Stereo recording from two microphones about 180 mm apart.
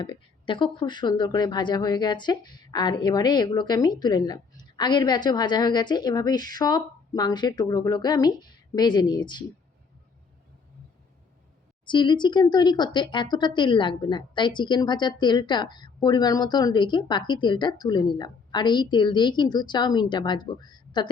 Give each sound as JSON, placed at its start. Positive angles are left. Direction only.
{"t": 0.0, "sound": "speech", "side_deg": 25}
{"t": 11.9, "sound": "speech", "side_deg": 25}